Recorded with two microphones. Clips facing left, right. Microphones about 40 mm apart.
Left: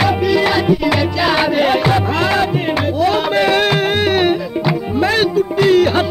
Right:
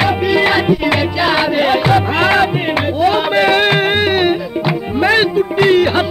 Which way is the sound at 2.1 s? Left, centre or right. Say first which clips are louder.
Right 3 dB; right.